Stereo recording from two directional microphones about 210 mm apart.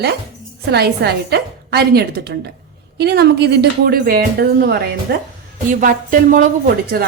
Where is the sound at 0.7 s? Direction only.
50° right (ahead or behind).